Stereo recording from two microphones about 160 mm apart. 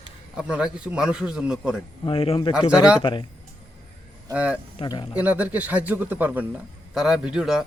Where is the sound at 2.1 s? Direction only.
35° left (ahead or behind).